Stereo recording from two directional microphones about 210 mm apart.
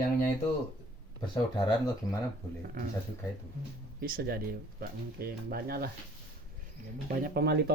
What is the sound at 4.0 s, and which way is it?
Speech, 45° right (ahead or behind).